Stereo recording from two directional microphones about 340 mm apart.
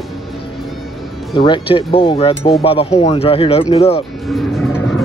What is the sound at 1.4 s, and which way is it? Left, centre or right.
Speech, centre.